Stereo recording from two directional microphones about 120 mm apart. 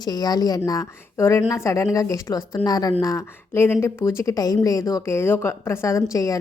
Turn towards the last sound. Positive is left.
turn(degrees=30)  # may be behind; listen again after turning